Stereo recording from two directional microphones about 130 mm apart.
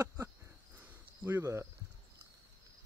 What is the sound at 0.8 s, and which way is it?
Cricket, 15° right (ahead or behind).